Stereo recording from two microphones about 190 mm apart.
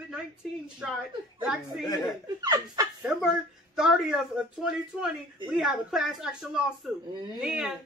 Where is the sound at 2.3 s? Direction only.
20° right (ahead or behind).